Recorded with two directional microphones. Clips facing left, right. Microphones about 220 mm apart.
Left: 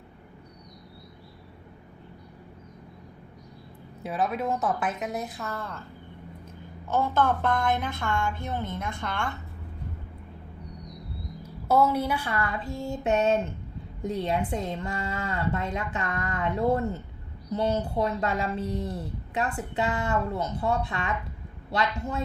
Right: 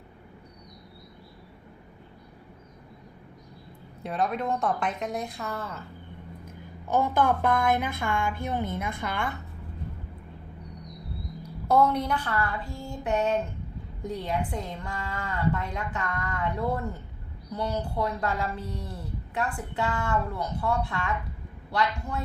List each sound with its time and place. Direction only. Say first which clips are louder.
4.0 s a woman's voice: even; 5° left (ahead or behind)
6.8 s a woman's voice: right 1 dB; 15° right (ahead or behind)
11.4 s a woman's voice: even; 5° left (ahead or behind); by 22.2 s 25° left (ahead or behind)